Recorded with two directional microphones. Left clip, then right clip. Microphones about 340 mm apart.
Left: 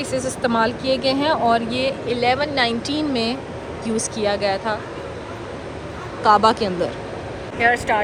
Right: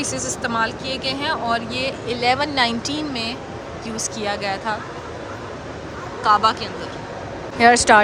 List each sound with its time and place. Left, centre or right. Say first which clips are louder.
0.0 s speech: left 3 dB; centre
6.2 s speech: left 2 dB; centre
7.6 s speech: right 4 dB; centre